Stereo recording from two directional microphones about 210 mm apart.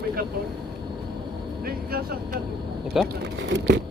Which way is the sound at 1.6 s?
45° right (ahead or behind).